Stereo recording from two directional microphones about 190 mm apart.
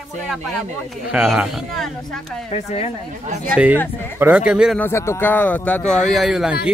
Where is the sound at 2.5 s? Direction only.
35° left (ahead or behind).